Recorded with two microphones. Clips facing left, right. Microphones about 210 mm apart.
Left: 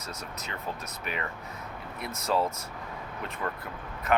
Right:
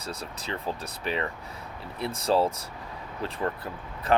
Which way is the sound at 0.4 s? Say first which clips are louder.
Right 5 dB; 30° right (ahead or behind).